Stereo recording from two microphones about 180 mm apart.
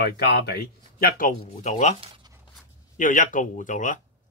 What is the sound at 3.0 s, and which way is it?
Speech, 45° left (ahead or behind).